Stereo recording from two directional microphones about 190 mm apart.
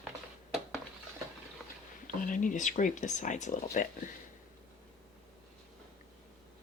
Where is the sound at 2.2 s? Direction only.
45° left (ahead or behind).